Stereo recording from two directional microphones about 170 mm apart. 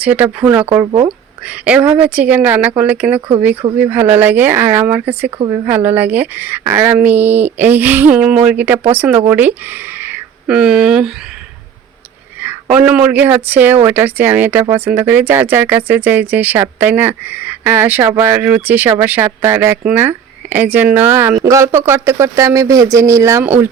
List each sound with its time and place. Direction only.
0.0 s a woman's voice: 10° right (ahead or behind)
0.9 s speech: 25° right (ahead or behind)
1.5 s a woman's voice: 10° right (ahead or behind)
3.2 s speech: 30° right (ahead or behind)
3.8 s a woman's voice: 10° right (ahead or behind)
12.7 s a woman's voice: 10° right (ahead or behind)